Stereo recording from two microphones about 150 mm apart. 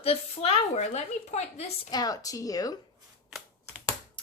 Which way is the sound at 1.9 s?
25° left (ahead or behind).